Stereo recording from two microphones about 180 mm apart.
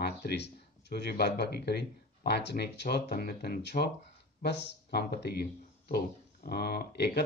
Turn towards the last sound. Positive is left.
turn(degrees=65)  # may be behind; listen again after turning